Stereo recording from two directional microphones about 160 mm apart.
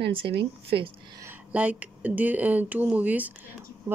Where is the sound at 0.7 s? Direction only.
35° right (ahead or behind).